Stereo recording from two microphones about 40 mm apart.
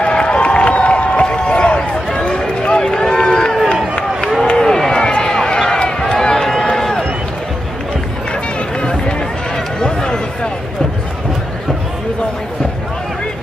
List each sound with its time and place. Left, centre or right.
0.0 s crowd: left
1.8 s run: centre
4.6 s a sound: centre
5.6 s run: left
8.3 s run: left